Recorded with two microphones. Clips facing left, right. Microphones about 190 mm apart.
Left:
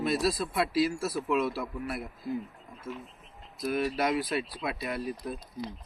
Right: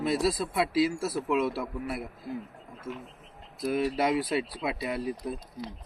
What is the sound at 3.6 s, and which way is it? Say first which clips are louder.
Speech: right 2 dB; 25° right (ahead or behind).